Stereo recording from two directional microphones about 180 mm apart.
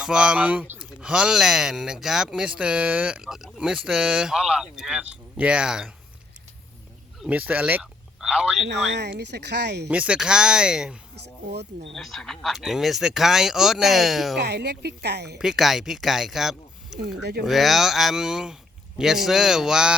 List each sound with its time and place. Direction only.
0.0 s speech: 5° right (ahead or behind)
7.2 s a man's voice: 10° right (ahead or behind)
8.6 s speech: 75° right (ahead or behind)
9.9 s speech: 5° right (ahead or behind)
11.9 s speech: centre (ahead or behind)
14.3 s speech: 70° right (ahead or behind)
15.4 s speech: centre (ahead or behind)
17.0 s speech: 65° right (ahead or behind)
17.4 s speech: centre (ahead or behind)